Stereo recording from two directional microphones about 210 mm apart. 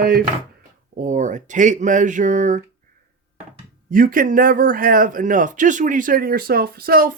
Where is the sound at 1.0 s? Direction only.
35° right (ahead or behind).